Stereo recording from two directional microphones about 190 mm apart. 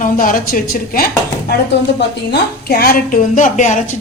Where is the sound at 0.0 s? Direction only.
45° left (ahead or behind).